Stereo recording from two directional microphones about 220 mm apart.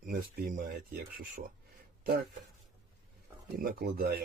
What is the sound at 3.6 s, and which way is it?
Speech, 40° right (ahead or behind).